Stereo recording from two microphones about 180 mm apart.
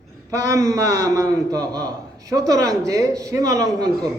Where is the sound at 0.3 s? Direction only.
20° right (ahead or behind).